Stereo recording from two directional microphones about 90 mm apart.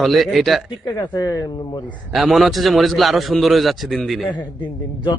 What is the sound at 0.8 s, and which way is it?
Speech, 50° left (ahead or behind).